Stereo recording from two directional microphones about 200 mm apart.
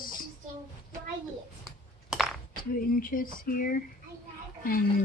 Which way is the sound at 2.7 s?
45° left (ahead or behind).